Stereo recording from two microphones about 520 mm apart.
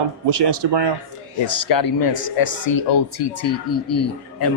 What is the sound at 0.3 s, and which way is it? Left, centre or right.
Speech, right.